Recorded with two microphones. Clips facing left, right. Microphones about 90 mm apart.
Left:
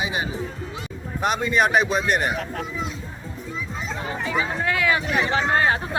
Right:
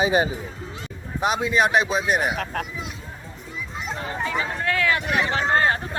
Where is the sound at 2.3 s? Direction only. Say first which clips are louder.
Right 1 dB; 60° right (ahead or behind).